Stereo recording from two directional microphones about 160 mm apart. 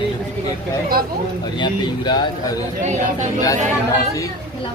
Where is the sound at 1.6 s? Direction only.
25° left (ahead or behind).